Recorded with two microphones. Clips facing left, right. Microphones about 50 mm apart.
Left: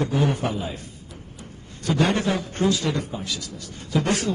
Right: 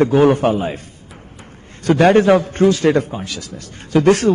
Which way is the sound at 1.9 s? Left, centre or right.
Right.